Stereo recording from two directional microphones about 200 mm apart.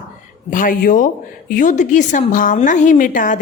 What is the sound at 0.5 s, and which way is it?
A woman's voice, 45° left (ahead or behind).